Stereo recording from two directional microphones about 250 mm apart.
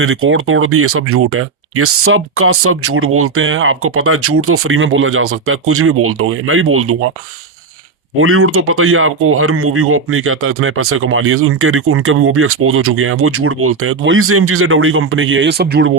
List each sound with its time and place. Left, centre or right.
0.0 s speech: right
8.2 s speech: right